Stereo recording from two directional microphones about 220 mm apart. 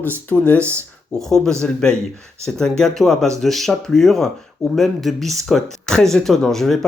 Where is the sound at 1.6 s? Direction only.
5° left (ahead or behind).